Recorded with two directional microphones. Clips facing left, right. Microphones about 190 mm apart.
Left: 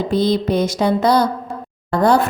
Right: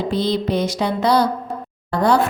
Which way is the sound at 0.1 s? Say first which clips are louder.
Left 4 dB; 45° left (ahead or behind).